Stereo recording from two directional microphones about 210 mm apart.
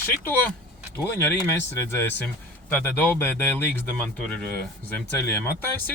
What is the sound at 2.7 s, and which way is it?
Speech, 10° left (ahead or behind).